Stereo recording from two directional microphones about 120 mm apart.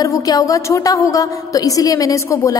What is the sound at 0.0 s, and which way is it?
A woman's voice, 30° left (ahead or behind).